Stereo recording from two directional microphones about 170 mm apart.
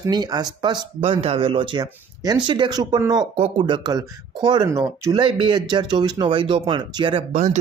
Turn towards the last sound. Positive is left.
turn(degrees=-40)  # may be behind; listen again after turning